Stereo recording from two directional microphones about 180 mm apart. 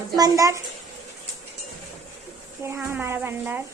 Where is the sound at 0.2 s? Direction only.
20° right (ahead or behind).